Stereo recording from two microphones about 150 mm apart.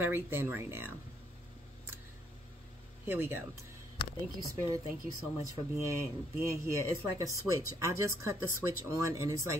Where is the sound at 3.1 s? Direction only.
15° right (ahead or behind).